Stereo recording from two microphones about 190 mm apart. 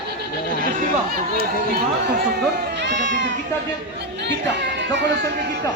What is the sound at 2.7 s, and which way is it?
Speech, 70° right (ahead or behind).